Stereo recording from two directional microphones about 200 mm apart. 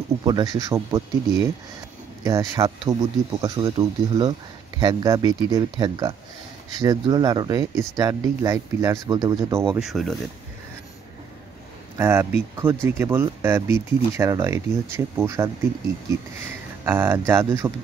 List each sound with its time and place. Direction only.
0.2 s speech: 20° right (ahead or behind)
9.8 s speech: centre (ahead or behind)
12.0 s speech: 10° right (ahead or behind)
16.8 s speech: 10° right (ahead or behind)